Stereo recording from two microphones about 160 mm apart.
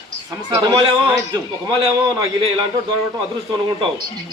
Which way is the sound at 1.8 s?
35° right (ahead or behind).